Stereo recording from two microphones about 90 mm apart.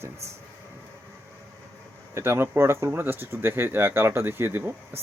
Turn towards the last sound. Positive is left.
turn(degrees=-25)  # may be behind; listen again after turning